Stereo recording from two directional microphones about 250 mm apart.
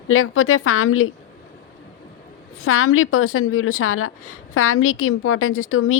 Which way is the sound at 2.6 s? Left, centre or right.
Left.